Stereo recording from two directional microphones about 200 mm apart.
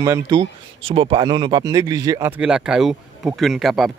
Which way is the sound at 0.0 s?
15° right (ahead or behind).